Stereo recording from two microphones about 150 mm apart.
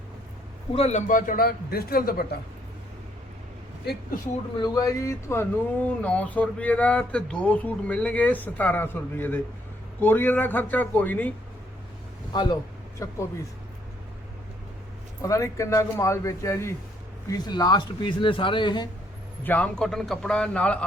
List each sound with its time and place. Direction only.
0.7 s a man's voice: 45° left (ahead or behind); by 2.2 s 85° left
4.5 s speech: 25° left (ahead or behind); by 11.3 s 10° left (ahead or behind)
12.3 s speech: 30° left (ahead or behind)
15.2 s speech: 20° left (ahead or behind)
19.5 s speech: 10° left (ahead or behind)